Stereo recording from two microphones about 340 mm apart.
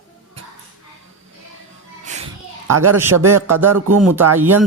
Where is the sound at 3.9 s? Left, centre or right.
Right.